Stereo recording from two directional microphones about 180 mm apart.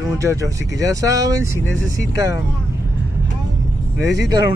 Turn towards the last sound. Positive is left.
turn(degrees=-20)  # may be behind; listen again after turning